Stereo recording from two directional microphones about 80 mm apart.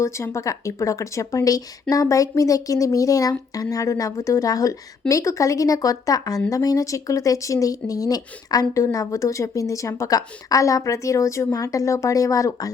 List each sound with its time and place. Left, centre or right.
0.0 s speech: left